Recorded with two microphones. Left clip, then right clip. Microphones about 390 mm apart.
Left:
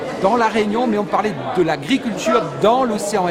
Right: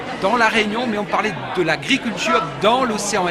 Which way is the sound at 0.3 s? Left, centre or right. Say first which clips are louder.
Even; right.